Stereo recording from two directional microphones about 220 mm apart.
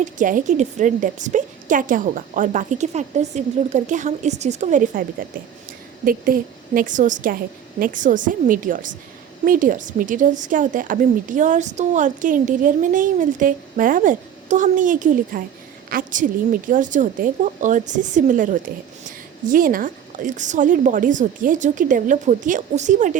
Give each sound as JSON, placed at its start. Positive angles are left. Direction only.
{"t": 0.0, "sound": "a woman's voice", "side_deg": -35}
{"t": 6.1, "sound": "a woman's voice", "side_deg": -40}